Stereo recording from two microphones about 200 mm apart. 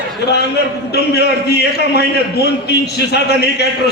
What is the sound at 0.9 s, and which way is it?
A man's voice, 55° left (ahead or behind).